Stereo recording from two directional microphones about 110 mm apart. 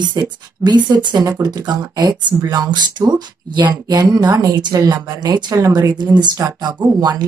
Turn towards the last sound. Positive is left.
turn(degrees=-40)  # may be behind; listen again after turning